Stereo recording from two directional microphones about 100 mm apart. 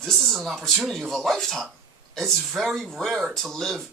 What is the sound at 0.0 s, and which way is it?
Speech, 5° left (ahead or behind).